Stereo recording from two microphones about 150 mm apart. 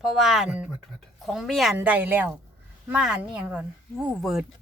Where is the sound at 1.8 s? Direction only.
10° right (ahead or behind).